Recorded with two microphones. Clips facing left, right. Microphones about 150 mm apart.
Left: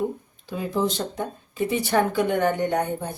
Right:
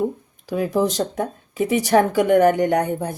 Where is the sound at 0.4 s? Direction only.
90° right.